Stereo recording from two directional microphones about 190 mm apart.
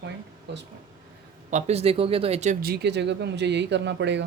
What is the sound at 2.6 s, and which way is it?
Speech, 60° right (ahead or behind).